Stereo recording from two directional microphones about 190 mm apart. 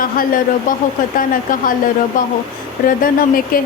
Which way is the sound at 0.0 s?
45° left (ahead or behind).